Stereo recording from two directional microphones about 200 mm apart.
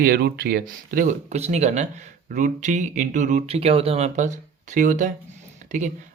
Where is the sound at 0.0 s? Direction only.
50° right (ahead or behind).